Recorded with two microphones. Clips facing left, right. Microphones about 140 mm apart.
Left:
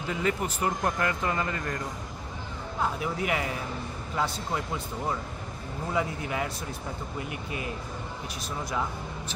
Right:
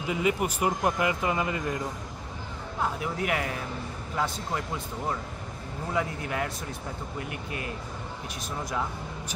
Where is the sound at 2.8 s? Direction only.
Centre (ahead or behind).